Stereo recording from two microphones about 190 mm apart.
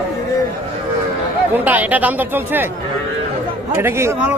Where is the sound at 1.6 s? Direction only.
10° right (ahead or behind).